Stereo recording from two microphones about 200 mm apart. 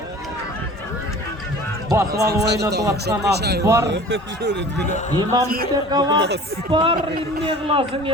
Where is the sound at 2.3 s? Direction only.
55° right (ahead or behind).